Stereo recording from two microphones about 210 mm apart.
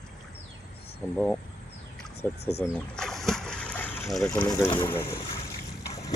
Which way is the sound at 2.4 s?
50° left (ahead or behind).